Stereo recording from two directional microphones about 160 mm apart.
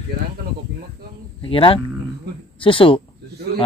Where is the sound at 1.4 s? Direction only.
35° left (ahead or behind).